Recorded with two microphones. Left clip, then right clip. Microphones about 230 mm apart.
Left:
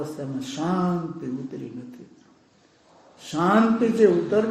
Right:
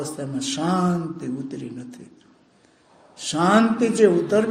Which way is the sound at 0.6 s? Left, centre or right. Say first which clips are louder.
Right 3 dB; right.